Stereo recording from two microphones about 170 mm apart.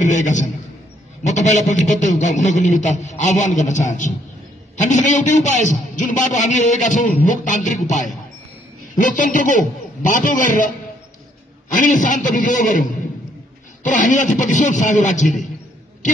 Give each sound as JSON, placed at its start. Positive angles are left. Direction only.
{"t": 0.0, "sound": "a man's voice", "side_deg": 45}
{"t": 11.7, "sound": "a man's voice", "side_deg": 50}